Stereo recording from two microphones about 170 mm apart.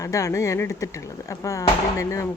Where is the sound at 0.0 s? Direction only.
20° left (ahead or behind).